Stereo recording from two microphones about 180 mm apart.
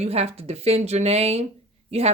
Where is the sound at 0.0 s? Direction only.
35° right (ahead or behind).